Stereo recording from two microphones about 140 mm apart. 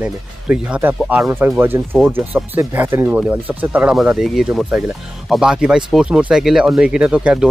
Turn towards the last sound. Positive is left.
turn(degrees=-10)  # may be behind; listen again after turning